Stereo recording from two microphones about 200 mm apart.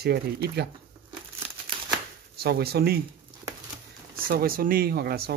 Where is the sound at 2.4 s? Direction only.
50° right (ahead or behind).